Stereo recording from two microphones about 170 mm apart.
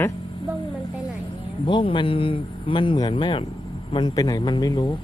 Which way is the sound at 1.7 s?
30° left (ahead or behind).